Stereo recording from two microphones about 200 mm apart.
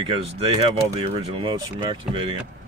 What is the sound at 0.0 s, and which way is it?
Speech, 25° right (ahead or behind).